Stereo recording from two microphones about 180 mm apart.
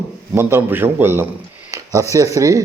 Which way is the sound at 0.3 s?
15° right (ahead or behind).